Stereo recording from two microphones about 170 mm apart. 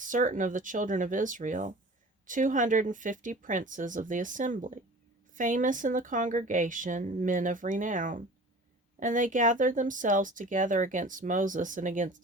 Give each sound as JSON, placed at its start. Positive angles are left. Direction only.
{"t": 0.0, "sound": "speech", "side_deg": -50}